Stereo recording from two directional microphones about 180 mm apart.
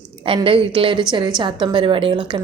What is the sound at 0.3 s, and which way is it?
Speech, 30° right (ahead or behind).